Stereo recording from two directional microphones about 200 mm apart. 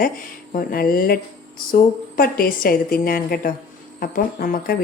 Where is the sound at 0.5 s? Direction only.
45° left (ahead or behind).